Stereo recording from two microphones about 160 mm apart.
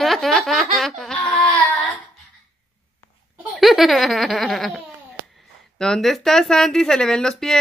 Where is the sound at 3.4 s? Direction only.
Centre (ahead or behind).